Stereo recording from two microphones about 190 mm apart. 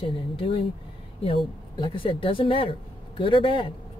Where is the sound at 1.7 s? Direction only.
25° left (ahead or behind).